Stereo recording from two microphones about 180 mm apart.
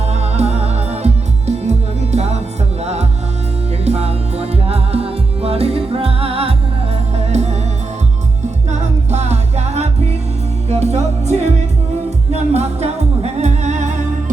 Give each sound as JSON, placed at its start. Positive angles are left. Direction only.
{"t": 0.1, "sound": "music", "side_deg": -35}
{"t": 8.7, "sound": "music", "side_deg": -40}